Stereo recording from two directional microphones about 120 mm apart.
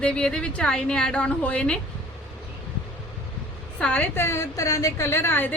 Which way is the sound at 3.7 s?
10° left (ahead or behind).